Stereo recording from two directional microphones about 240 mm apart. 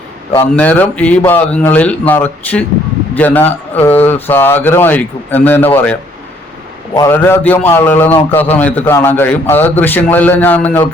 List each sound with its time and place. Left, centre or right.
0.3 s a man's voice: centre